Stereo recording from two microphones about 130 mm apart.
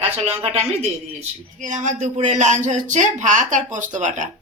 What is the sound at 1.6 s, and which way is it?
Speech, 75° right (ahead or behind).